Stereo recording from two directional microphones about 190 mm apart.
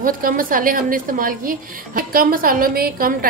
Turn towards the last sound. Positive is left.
turn(degrees=-50)  # may be behind; listen again after turning